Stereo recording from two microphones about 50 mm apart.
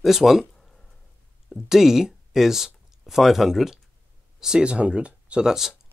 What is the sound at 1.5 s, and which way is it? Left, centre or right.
Speech, centre.